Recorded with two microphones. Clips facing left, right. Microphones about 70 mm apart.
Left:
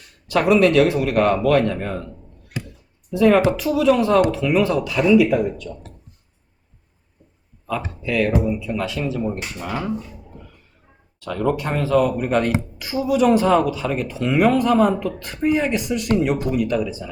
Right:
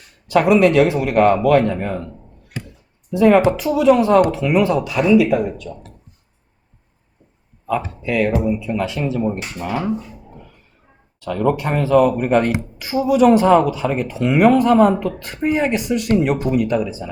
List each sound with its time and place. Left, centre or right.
0.3 s speech: right
3.1 s speech: right
8.0 s speech: right
8.5 s speech: right
11.2 s speech: right